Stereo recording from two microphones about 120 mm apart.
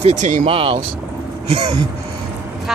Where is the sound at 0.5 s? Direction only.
50° right (ahead or behind).